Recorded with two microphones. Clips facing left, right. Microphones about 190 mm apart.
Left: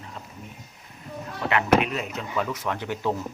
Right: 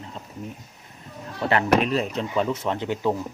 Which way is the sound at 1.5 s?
35° right (ahead or behind).